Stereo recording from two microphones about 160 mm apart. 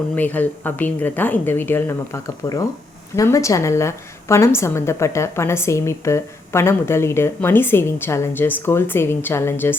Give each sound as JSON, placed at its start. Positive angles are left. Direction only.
{"t": 0.2, "sound": "a woman's voice", "side_deg": 10}